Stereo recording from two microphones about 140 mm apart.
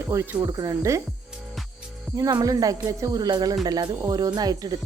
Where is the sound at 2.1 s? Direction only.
25° right (ahead or behind).